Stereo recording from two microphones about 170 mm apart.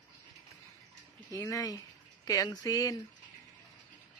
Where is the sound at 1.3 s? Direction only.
20° left (ahead or behind).